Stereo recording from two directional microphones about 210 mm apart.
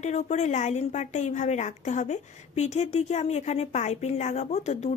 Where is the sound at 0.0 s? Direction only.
30° left (ahead or behind).